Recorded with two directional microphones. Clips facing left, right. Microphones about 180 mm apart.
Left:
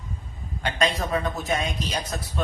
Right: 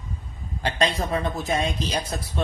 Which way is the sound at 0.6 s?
30° right (ahead or behind).